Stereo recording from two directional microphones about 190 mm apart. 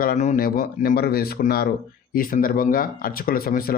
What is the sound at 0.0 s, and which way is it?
A man's voice, 45° left (ahead or behind).